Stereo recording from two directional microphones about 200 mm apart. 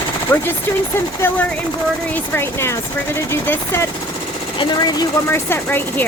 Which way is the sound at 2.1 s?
10° left (ahead or behind).